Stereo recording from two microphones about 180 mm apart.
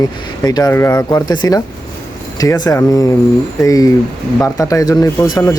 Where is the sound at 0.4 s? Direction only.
20° left (ahead or behind).